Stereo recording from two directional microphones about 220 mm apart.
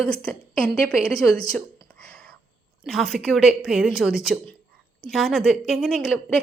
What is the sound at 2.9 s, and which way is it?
Speech, centre (ahead or behind).